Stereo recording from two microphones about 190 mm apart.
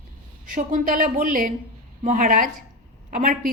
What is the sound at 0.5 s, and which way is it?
A woman's voice, 45° right (ahead or behind).